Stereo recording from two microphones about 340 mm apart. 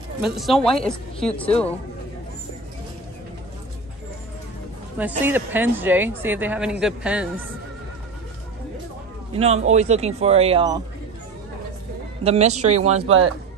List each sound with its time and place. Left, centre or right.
0.2 s speech: centre
4.9 s speech: centre
9.3 s a man's voice: centre
12.2 s speech: centre